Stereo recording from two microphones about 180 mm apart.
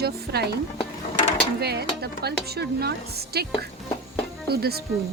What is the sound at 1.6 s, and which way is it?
Speech, 60° right (ahead or behind).